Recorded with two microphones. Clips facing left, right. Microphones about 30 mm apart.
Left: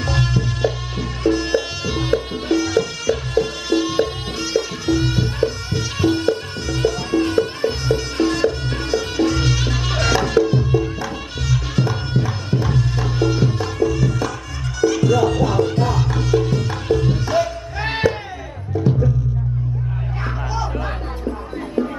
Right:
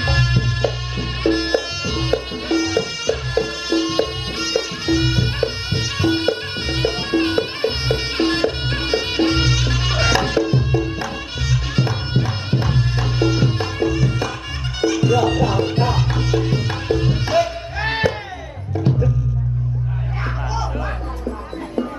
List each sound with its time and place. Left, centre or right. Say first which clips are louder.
0.0 s music: right 1 dB; right
9.6 s music: right 1 dB; right
11.7 s bagpipes: even; right
12.6 s music: even; right
15.6 s music: even; right
17.7 s music: even; centre
18.9 s music: left 1 dB; right